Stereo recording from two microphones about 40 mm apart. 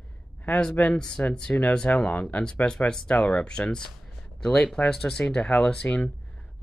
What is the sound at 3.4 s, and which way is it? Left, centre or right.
Speech, left.